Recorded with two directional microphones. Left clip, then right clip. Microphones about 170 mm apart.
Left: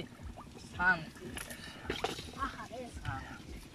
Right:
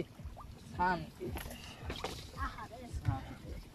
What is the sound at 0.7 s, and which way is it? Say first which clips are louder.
Speech: left 3 dB; 35° right (ahead or behind).